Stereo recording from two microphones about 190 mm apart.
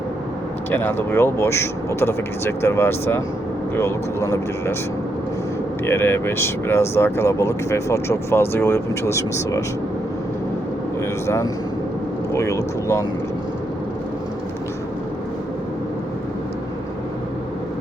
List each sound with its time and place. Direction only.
0.7 s speech: 10° left (ahead or behind)
5.8 s speech: 10° left (ahead or behind)
12.3 s speech: 15° left (ahead or behind)